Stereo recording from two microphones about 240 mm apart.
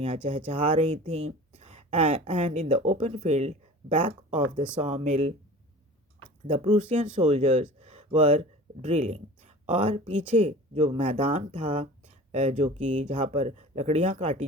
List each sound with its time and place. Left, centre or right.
0.0 s speech: right
6.5 s speech: right